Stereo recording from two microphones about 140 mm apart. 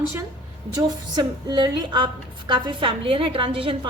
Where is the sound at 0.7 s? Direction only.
30° right (ahead or behind).